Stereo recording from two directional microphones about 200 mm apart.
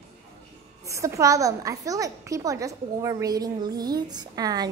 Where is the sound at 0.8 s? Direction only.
15° right (ahead or behind).